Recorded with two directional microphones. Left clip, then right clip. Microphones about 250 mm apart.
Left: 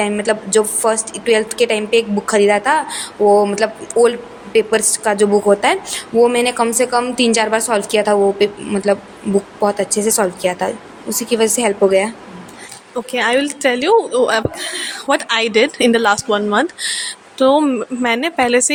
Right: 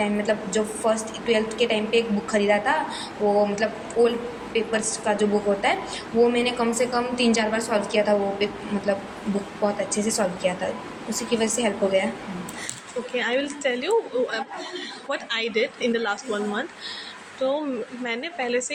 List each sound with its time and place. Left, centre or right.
0.0 s a woman's voice: left
9.6 s a woman's voice: left
13.1 s a woman's voice: left